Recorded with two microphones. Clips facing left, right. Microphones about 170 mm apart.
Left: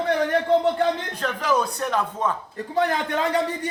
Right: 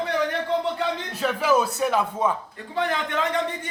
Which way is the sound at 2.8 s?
40° left (ahead or behind).